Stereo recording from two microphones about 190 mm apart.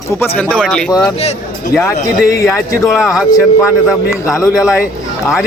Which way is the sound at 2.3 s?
15° left (ahead or behind).